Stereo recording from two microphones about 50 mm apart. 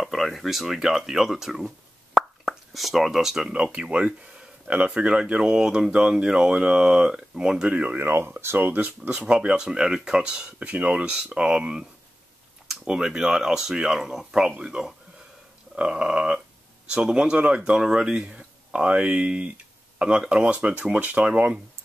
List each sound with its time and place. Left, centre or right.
0.0 s speech: centre
2.1 s plop: centre
3.5 s speech: right
7.7 s speech: right
8.0 s speech: right
8.5 s speech: right
9.3 s speech: centre